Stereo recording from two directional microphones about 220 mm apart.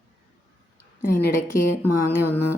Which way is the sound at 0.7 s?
10° left (ahead or behind).